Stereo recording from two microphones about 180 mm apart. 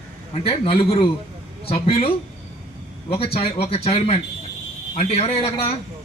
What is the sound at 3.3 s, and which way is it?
A man's voice, 35° left (ahead or behind).